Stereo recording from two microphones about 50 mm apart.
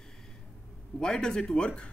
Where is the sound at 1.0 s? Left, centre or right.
Centre.